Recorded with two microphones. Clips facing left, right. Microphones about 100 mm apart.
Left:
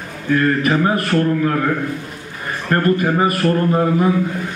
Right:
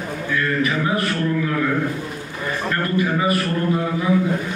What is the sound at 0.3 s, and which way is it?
A man's voice, 50° left (ahead or behind).